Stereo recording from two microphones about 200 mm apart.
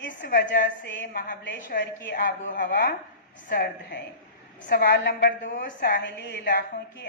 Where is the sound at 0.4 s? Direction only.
55° left (ahead or behind).